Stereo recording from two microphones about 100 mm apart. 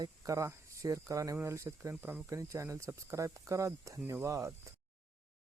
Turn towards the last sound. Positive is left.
turn(degrees=-30)  # may be behind; listen again after turning